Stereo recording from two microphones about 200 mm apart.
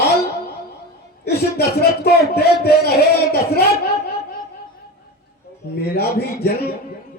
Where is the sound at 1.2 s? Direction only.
55° left (ahead or behind).